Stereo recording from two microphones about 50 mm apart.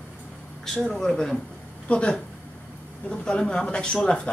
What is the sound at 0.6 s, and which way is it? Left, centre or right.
Speech, centre.